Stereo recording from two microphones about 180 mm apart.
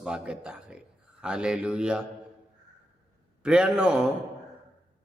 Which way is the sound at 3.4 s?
5° right (ahead or behind).